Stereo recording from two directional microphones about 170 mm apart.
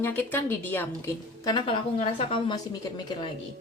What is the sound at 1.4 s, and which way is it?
A woman's voice, 25° left (ahead or behind).